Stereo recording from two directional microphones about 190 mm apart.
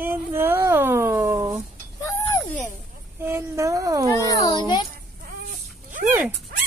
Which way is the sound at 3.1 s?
10° right (ahead or behind).